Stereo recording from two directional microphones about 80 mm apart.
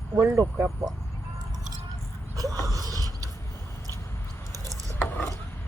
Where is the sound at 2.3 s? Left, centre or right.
Right.